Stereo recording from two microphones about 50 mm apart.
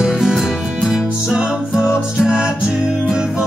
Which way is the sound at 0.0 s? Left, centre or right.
Centre.